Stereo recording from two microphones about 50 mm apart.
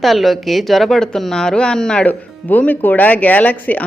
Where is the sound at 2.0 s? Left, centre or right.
Left.